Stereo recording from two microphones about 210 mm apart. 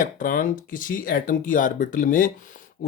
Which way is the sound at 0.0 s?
40° left (ahead or behind).